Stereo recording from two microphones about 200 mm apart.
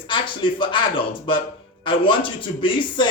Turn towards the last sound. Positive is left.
turn(degrees=25)  # may be behind; listen again after turning